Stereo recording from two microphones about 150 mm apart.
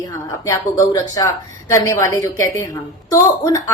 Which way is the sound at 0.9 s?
25° left (ahead or behind).